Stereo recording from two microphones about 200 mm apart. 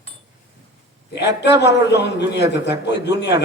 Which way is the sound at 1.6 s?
60° left (ahead or behind).